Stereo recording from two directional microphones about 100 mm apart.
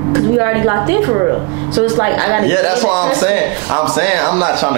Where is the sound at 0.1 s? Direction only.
15° right (ahead or behind).